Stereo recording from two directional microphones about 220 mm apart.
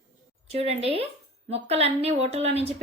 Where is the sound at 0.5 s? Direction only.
30° right (ahead or behind).